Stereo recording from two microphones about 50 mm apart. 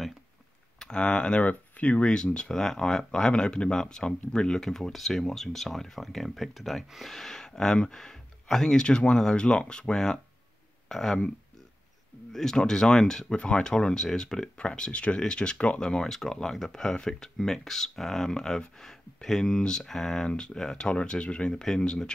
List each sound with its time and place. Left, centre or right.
0.7 s speech: centre
1.4 s speech: left; by 11.1 s centre
12.3 s speech: centre